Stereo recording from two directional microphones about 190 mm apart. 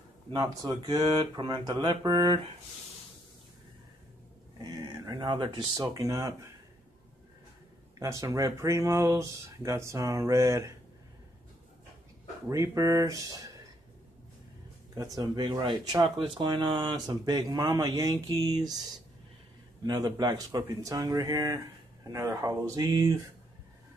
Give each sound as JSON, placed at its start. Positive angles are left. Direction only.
{"t": 0.3, "sound": "speech", "side_deg": -20}
{"t": 4.6, "sound": "speech", "side_deg": -20}
{"t": 8.0, "sound": "speech", "side_deg": -15}
{"t": 12.4, "sound": "speech", "side_deg": -15}
{"t": 15.0, "sound": "speech", "side_deg": -20}
{"t": 19.8, "sound": "speech", "side_deg": -20}